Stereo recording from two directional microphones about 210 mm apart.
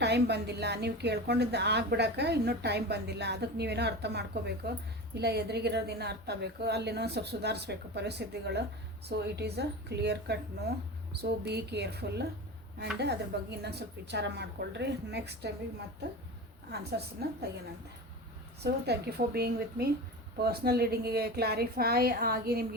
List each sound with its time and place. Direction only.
0.0 s a woman's voice: 55° right (ahead or behind)
16.7 s a woman's voice: 50° right (ahead or behind)
18.6 s a woman's voice: 50° right (ahead or behind)